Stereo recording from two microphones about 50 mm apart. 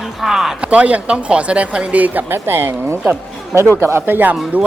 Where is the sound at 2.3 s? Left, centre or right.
Right.